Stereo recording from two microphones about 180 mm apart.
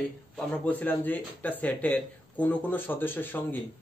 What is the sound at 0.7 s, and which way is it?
Speech, 10° left (ahead or behind).